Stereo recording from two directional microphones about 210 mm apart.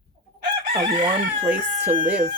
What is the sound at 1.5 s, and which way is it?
Speech, 40° right (ahead or behind).